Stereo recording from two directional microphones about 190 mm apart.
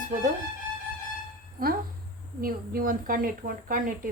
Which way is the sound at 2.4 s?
50° right (ahead or behind).